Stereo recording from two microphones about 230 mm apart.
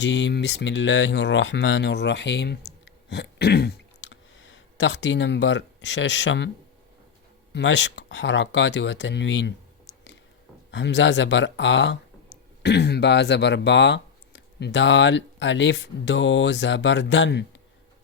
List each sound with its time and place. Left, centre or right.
0.0 s speech: left
7.5 s speech: left
10.7 s speech: left